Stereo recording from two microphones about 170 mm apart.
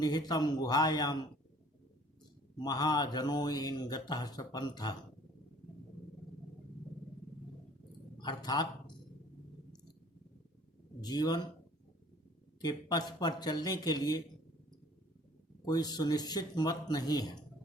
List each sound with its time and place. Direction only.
0.0 s mantra: 25° left (ahead or behind)
2.6 s mantra: 25° left (ahead or behind)
8.2 s mantra: 25° left (ahead or behind)
11.0 s mantra: 25° left (ahead or behind)
12.6 s mantra: 20° left (ahead or behind)
15.6 s mantra: 25° left (ahead or behind)